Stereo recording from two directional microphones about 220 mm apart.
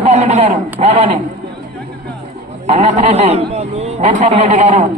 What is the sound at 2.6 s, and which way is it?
A man's voice, 30° right (ahead or behind).